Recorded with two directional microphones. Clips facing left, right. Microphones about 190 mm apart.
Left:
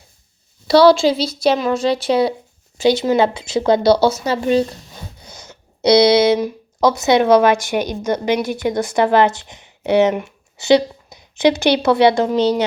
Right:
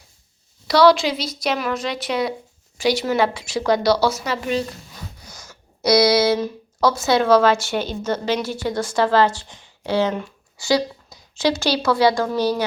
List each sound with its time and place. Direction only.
0.7 s speech: 30° left (ahead or behind)